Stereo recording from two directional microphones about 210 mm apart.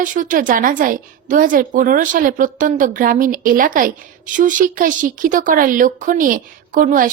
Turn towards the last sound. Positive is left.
turn(degrees=-40)  # may be behind; listen again after turning